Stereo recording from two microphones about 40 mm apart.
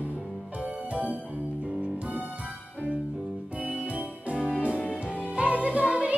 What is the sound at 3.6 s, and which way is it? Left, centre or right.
Music, right.